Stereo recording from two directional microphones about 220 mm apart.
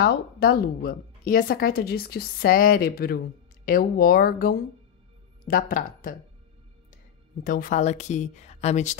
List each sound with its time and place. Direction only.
0.0 s speech: 45° left (ahead or behind)
7.4 s speech: 40° left (ahead or behind)